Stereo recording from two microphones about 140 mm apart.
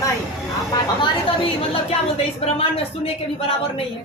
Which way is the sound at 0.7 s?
35° left (ahead or behind).